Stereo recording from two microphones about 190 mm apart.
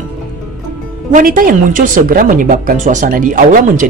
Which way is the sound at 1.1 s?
45° right (ahead or behind).